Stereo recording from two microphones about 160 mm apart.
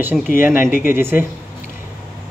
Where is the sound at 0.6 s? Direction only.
60° left (ahead or behind).